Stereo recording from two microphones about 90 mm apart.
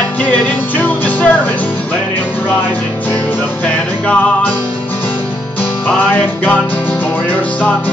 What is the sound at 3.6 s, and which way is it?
Music, 15° left (ahead or behind).